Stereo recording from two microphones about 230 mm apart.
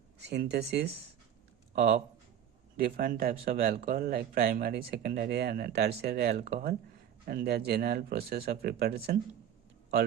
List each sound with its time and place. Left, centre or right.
0.2 s speech: right